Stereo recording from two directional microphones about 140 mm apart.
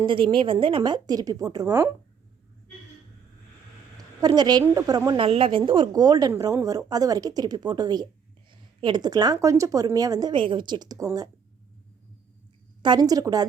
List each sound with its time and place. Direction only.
0.0 s a woman's voice: 35° right (ahead or behind); by 1.9 s 20° right (ahead or behind)
4.3 s a woman's voice: 30° right (ahead or behind)
5.2 s a woman's voice: 40° right (ahead or behind)
12.8 s a woman's voice: 30° right (ahead or behind)